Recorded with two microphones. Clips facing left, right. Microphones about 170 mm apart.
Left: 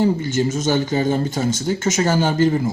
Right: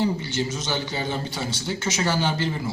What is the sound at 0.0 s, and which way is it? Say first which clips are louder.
A man's voice: left 6 dB; 45° left (ahead or behind).